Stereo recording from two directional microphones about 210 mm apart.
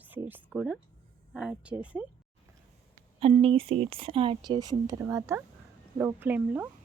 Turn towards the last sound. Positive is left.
turn(degrees=-10)  # may be behind; listen again after turning